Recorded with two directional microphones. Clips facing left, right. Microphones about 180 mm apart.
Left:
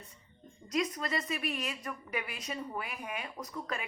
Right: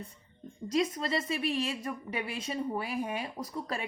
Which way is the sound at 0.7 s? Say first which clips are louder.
Right 3 dB; 25° right (ahead or behind).